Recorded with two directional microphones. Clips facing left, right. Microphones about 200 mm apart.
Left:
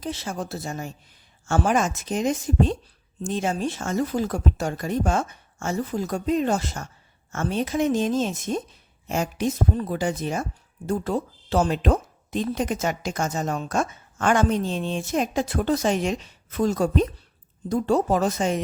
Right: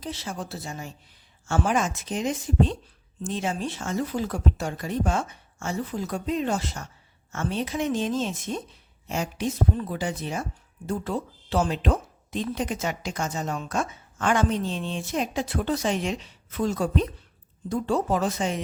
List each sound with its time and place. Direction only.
0.0 s a woman's voice: 50° left (ahead or behind)